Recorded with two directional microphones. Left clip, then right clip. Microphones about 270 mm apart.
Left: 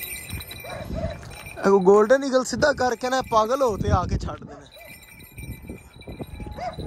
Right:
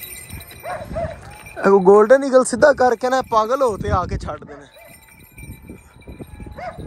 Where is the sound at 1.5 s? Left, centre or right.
Centre.